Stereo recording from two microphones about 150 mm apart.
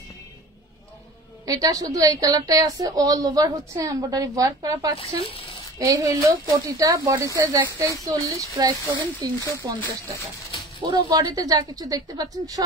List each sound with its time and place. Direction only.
1.4 s a woman's voice: 25° right (ahead or behind)
4.9 s speech: 40° left (ahead or behind)
5.8 s a woman's voice: 20° right (ahead or behind)
10.8 s a woman's voice: 25° right (ahead or behind)